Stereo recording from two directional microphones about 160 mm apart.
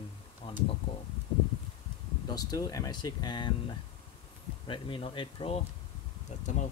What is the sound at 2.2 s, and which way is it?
Speech, 25° left (ahead or behind).